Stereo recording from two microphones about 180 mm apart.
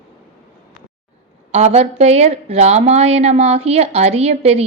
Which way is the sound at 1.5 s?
35° right (ahead or behind).